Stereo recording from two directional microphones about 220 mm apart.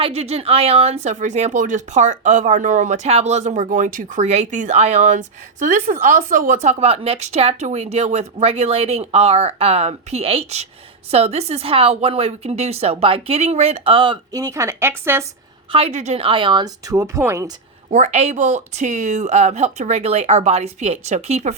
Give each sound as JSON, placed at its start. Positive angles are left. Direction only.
{"t": 0.0, "sound": "a woman's voice", "side_deg": -30}
{"t": 15.7, "sound": "a woman's voice", "side_deg": -30}
{"t": 17.9, "sound": "speech", "side_deg": -30}